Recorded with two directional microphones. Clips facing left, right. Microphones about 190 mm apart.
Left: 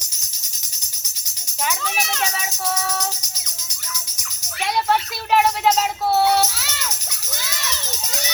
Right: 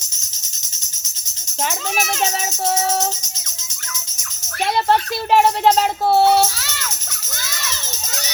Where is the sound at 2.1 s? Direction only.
25° right (ahead or behind).